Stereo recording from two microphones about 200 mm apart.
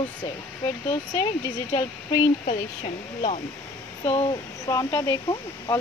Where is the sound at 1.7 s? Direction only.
20° left (ahead or behind).